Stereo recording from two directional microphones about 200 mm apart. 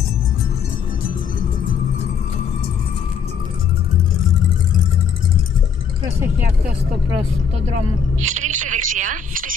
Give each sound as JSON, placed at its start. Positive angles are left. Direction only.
{"t": 8.3, "sound": "speech", "side_deg": -90}
{"t": 8.6, "sound": "speech", "side_deg": -40}